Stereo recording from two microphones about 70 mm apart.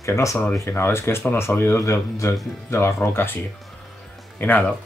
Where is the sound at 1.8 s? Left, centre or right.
Left.